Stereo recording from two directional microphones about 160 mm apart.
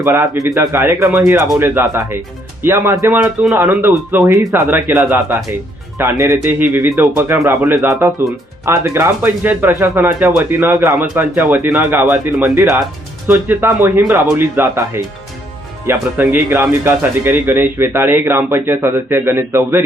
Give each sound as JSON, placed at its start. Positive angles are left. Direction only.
{"t": 0.0, "sound": "speech", "side_deg": -15}